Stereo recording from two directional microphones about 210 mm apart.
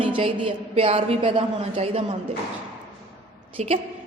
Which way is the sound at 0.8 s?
25° right (ahead or behind).